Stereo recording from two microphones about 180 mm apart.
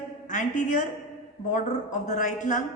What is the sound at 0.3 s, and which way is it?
A woman's voice, 45° left (ahead or behind).